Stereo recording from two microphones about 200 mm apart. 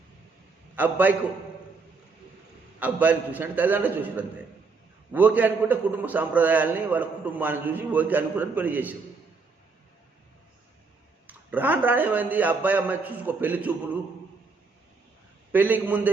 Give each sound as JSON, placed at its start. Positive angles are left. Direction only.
{"t": 0.8, "sound": "a man's voice", "side_deg": -10}
{"t": 2.7, "sound": "a man's voice", "side_deg": -10}
{"t": 11.3, "sound": "a man's voice", "side_deg": -10}
{"t": 15.5, "sound": "a man's voice", "side_deg": -10}